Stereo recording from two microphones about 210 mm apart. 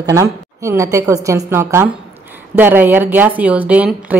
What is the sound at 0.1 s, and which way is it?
A woman's voice, 15° right (ahead or behind).